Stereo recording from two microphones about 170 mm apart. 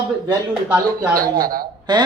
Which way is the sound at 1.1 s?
60° right (ahead or behind).